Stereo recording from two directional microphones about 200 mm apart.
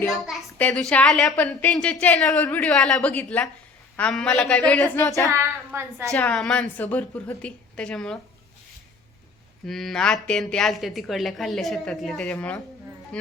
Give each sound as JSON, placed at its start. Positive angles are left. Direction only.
{"t": 0.4, "sound": "a woman's voice", "side_deg": 5}
{"t": 4.9, "sound": "female singing", "side_deg": 10}
{"t": 5.2, "sound": "a woman's voice", "side_deg": -15}
{"t": 6.1, "sound": "a woman's voice", "side_deg": 5}
{"t": 9.6, "sound": "a woman's voice", "side_deg": 0}